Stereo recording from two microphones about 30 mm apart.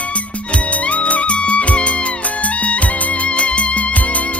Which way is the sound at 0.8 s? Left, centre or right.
Left.